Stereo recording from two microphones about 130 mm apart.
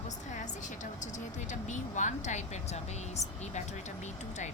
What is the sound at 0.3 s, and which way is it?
A woman's voice, 70° left (ahead or behind).